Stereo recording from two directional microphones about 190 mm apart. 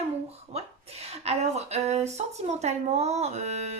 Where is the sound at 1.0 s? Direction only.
35° right (ahead or behind).